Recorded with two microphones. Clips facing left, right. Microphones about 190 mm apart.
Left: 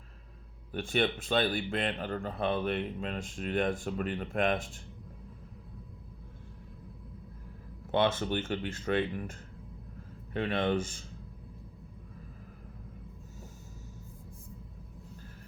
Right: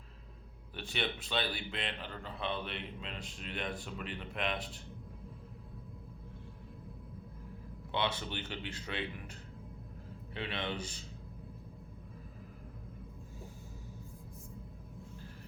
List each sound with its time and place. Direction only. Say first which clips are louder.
0.7 s speech: left 8 dB; 50° left (ahead or behind)
7.9 s speech: left 8 dB; 50° left (ahead or behind)
10.3 s speech: left 9 dB; 50° left (ahead or behind)